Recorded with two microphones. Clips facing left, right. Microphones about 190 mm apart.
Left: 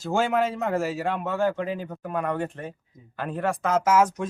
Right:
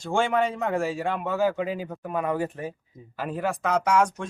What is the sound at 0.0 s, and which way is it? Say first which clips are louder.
Speech: even; 5° left (ahead or behind).